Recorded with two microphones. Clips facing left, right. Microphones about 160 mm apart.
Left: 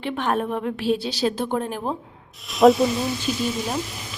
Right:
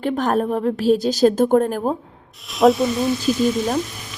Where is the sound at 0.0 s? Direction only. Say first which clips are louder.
Right 5 dB; 40° right (ahead or behind).